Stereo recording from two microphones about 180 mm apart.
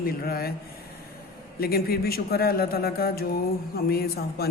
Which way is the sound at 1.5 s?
60° left (ahead or behind).